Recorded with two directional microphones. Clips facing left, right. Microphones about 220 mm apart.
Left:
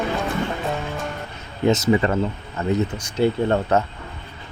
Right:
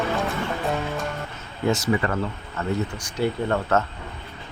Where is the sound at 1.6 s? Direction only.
20° left (ahead or behind).